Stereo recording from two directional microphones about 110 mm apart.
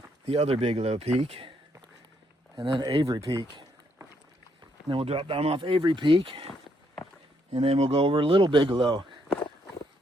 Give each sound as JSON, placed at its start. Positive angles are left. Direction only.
{"t": 0.3, "sound": "speech", "side_deg": -65}
{"t": 2.6, "sound": "speech", "side_deg": -50}
{"t": 3.1, "sound": "speech", "side_deg": -35}
{"t": 4.9, "sound": "speech", "side_deg": -55}
{"t": 5.5, "sound": "speech", "side_deg": -50}
{"t": 6.5, "sound": "walk", "side_deg": 10}
{"t": 7.5, "sound": "speech", "side_deg": -65}